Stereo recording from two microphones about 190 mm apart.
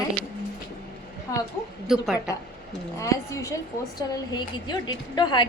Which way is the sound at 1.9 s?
Centre (ahead or behind).